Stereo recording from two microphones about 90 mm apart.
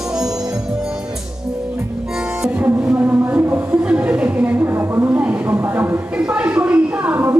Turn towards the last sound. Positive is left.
turn(degrees=-20)  # may be behind; listen again after turning